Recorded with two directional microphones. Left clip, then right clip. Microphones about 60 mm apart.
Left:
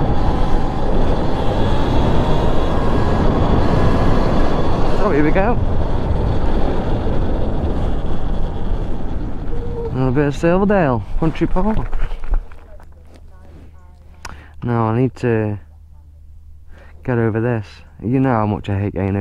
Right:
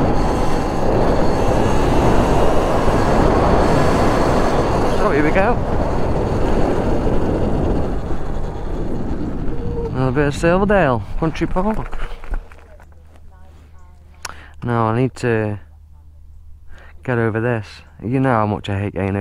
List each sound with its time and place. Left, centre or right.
0.0 s vehicle: right
10.5 s speech: right
10.8 s speech: right
14.2 s a sound: right
17.0 s speech: right